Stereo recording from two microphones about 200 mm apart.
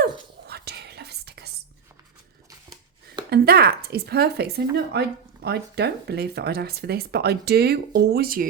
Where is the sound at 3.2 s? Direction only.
50° right (ahead or behind).